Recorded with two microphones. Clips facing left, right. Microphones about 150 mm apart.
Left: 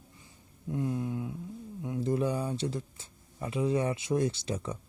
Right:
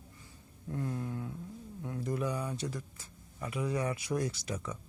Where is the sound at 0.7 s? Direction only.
15° left (ahead or behind).